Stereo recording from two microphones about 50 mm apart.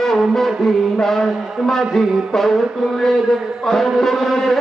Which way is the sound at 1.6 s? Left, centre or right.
Centre.